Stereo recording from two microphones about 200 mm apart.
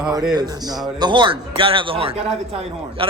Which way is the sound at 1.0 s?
25° right (ahead or behind).